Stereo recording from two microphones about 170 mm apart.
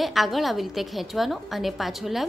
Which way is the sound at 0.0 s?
Centre (ahead or behind).